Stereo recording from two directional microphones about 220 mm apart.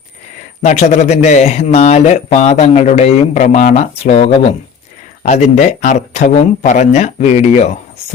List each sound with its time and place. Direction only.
0.6 s speech: 30° left (ahead or behind)